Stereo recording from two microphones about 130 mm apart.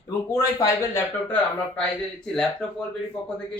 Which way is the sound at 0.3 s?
25° left (ahead or behind).